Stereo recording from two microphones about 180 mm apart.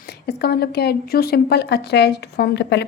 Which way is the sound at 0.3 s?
60° left (ahead or behind).